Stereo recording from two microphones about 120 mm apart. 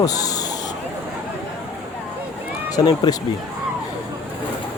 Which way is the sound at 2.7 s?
30° left (ahead or behind).